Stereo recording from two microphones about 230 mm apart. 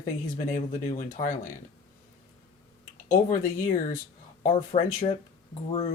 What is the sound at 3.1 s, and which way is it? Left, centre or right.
Speech, left.